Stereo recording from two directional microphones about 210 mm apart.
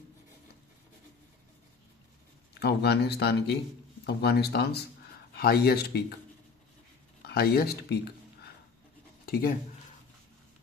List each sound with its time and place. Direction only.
2.6 s speech: 50° left (ahead or behind)
7.3 s speech: 45° left (ahead or behind)